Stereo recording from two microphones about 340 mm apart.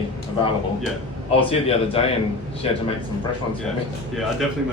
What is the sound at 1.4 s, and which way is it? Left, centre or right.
Speech, centre.